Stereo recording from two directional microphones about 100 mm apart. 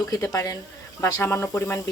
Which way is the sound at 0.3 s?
30° left (ahead or behind).